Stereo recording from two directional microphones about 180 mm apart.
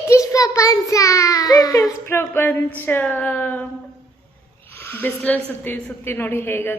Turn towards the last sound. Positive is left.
turn(degrees=10)  # may be behind; listen again after turning